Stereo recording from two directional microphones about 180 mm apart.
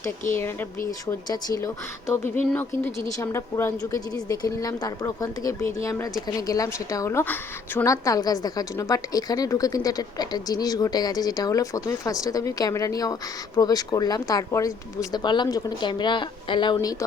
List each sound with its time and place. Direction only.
0.3 s speech: 15° left (ahead or behind)